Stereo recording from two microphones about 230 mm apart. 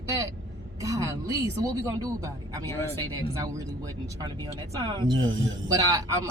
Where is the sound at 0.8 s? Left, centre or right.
Centre.